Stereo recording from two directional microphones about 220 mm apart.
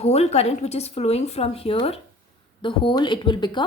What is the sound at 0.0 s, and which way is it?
A woman's voice, 30° left (ahead or behind).